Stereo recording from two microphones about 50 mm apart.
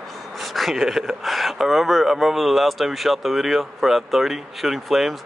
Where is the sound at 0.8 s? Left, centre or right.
Centre.